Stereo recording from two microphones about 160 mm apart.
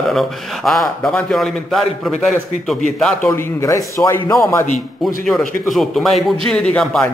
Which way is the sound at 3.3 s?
15° left (ahead or behind).